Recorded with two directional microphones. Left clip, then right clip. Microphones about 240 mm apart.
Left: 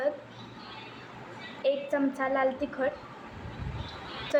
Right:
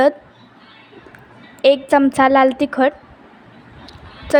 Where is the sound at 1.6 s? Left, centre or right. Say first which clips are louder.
Right 15 dB; right.